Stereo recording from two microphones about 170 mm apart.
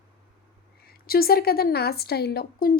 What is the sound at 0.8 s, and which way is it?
A woman's voice, 65° left (ahead or behind).